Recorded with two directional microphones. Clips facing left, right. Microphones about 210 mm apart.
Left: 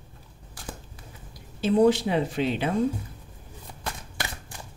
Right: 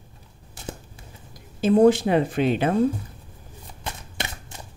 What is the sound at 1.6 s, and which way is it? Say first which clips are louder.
Speech: right 4 dB; 50° right (ahead or behind).